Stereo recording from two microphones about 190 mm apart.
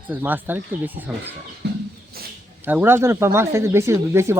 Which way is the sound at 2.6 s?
10° right (ahead or behind).